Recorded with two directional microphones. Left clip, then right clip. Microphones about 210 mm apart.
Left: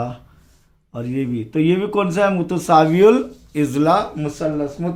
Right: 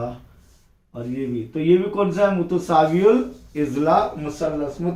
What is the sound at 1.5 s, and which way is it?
Speech, 55° left (ahead or behind).